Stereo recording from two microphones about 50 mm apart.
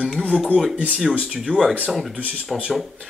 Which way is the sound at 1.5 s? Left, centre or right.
Right.